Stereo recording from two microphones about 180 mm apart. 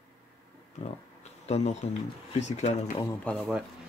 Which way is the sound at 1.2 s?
40° left (ahead or behind).